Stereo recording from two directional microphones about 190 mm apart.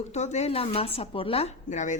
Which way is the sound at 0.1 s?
35° left (ahead or behind).